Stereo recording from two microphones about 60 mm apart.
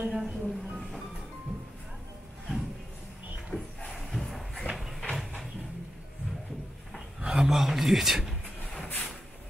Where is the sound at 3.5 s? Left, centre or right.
Left.